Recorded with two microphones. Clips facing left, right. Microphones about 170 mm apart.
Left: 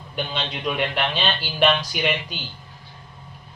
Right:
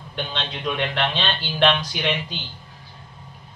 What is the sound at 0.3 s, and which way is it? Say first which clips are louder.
Speech: left 1 dB; 10° left (ahead or behind).